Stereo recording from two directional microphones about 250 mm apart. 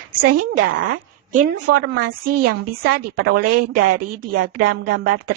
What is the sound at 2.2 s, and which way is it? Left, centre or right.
Speech, right.